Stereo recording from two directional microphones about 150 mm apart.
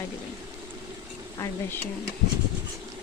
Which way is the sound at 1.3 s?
20° left (ahead or behind).